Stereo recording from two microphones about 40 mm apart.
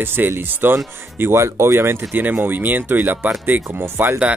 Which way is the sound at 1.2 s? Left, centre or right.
Right.